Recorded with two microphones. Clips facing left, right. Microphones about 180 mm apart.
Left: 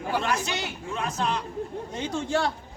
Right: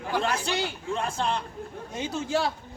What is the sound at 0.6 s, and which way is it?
Speech, 30° right (ahead or behind).